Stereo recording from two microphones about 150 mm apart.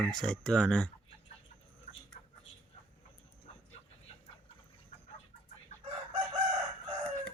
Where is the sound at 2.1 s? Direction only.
50° left (ahead or behind).